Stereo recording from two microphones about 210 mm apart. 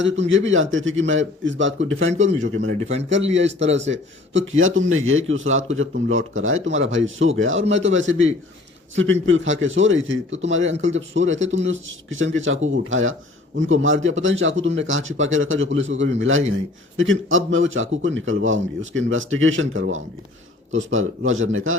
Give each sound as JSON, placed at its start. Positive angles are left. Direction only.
{"t": 0.0, "sound": "speech", "side_deg": -60}